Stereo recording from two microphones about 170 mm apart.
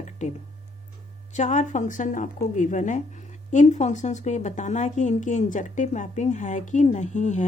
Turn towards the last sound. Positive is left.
turn(degrees=45)  # may be behind; listen again after turning